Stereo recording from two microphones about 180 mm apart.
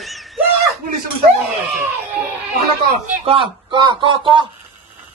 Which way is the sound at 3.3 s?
25° right (ahead or behind).